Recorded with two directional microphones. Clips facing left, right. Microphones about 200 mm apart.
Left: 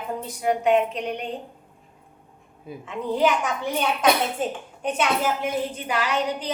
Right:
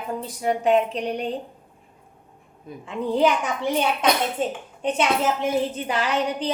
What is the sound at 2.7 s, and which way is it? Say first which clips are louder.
Speech: left 1 dB; 5° left (ahead or behind).